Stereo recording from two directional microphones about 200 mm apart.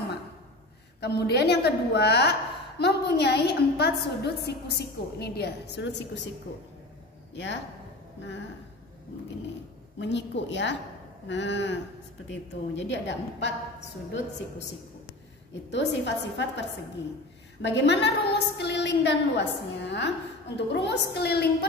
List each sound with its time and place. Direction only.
1.0 s a woman's voice: 55° left (ahead or behind)
9.9 s a woman's voice: 60° left (ahead or behind)
15.7 s a woman's voice: 60° left (ahead or behind)